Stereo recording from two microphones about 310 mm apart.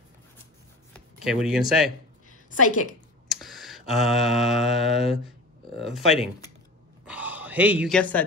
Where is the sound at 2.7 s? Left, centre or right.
Left.